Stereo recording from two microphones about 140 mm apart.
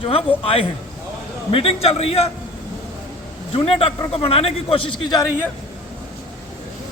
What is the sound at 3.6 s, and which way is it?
A man's voice, 45° left (ahead or behind).